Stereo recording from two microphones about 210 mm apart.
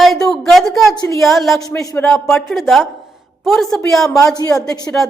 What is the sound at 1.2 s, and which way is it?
A woman's voice, centre (ahead or behind).